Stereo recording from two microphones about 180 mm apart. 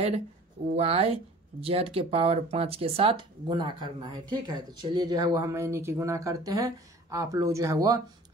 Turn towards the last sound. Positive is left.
turn(degrees=-20)  # may be behind; listen again after turning